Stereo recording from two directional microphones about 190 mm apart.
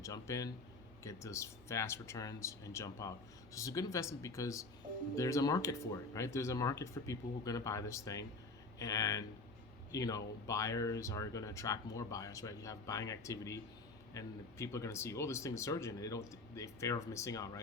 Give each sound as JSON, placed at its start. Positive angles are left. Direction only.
{"t": 0.0, "sound": "speech", "side_deg": 15}